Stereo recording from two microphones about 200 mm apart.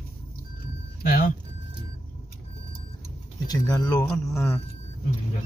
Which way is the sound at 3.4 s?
15° left (ahead or behind).